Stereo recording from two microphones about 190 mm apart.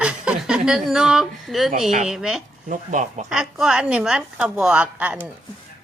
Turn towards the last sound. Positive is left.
turn(degrees=-5)  # may be behind; listen again after turning